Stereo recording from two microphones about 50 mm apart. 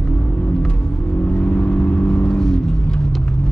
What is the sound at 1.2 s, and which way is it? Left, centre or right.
Vehicle, left.